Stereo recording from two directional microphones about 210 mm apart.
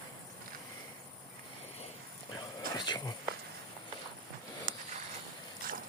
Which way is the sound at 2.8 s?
20° left (ahead or behind).